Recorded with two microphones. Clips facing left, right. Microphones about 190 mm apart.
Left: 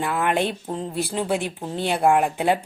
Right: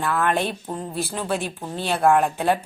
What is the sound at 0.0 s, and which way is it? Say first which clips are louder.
Speech: even; 15° left (ahead or behind).